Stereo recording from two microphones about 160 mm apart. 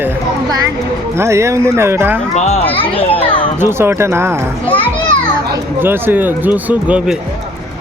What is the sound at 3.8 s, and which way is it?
Speech, 15° right (ahead or behind).